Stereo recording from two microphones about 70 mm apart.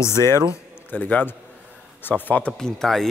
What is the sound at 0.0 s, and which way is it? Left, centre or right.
Speech, left.